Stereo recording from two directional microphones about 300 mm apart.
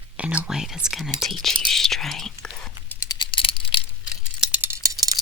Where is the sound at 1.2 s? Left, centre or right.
Centre.